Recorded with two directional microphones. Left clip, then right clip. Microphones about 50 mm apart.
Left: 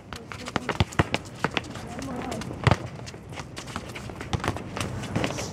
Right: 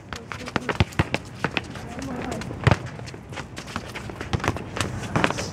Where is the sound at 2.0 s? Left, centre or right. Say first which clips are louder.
Right 2 dB; centre.